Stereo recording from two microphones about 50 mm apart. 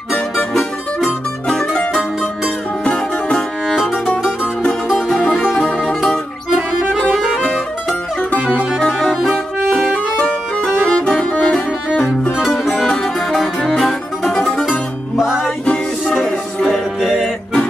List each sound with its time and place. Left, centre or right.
2.8 s music: left
3.6 s music: centre
5.0 s music: left
5.3 s music: centre
7.3 s music: centre
8.4 s music: right
9.7 s music: centre
12.7 s music: centre
16.6 s music: centre